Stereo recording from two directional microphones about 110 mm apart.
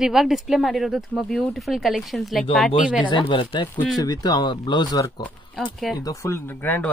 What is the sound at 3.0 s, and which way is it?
Speech, 45° left (ahead or behind).